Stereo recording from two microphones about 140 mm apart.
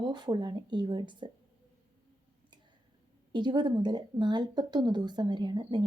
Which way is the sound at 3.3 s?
35° right (ahead or behind).